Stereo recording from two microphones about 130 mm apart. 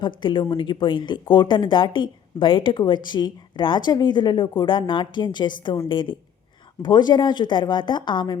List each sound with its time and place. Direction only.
0.2 s speech: 40° left (ahead or behind)